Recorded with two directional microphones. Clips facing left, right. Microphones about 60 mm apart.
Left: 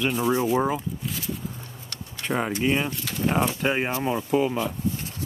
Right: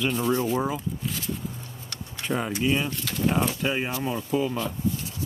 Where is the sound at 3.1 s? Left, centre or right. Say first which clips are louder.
Even; centre.